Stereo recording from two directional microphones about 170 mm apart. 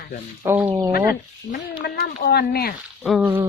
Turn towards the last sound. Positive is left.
turn(degrees=-10)  # may be behind; listen again after turning